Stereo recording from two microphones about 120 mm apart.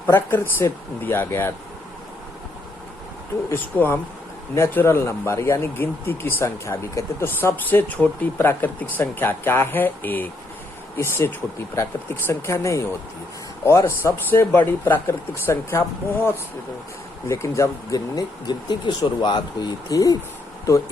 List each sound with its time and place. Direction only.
0.0 s speech: 20° left (ahead or behind)
3.5 s speech: 15° left (ahead or behind)
17.2 s speech: 25° left (ahead or behind)